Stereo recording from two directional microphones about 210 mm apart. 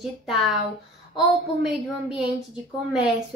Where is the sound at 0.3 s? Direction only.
Centre (ahead or behind).